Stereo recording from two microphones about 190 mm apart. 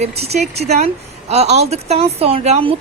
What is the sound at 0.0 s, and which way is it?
Speech, 35° right (ahead or behind).